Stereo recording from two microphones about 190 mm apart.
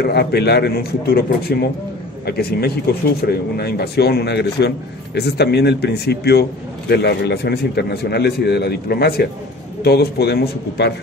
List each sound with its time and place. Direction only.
0.0 s speech: 60° left (ahead or behind)